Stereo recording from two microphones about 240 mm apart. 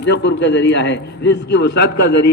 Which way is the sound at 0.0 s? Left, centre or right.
Left.